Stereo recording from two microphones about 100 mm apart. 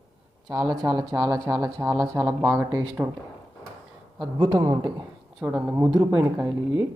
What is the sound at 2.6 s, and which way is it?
Speech, 40° right (ahead or behind).